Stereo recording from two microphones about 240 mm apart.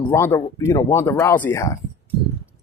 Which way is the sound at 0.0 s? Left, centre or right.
Centre.